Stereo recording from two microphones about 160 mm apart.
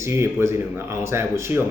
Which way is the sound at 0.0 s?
15° right (ahead or behind).